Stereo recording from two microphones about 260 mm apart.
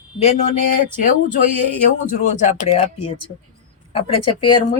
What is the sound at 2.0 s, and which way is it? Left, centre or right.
Speech, left.